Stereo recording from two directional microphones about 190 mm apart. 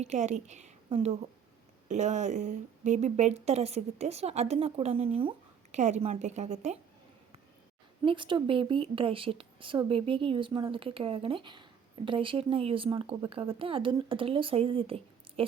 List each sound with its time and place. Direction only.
0.0 s speech: 35° right (ahead or behind)
8.0 s a woman's voice: 25° right (ahead or behind)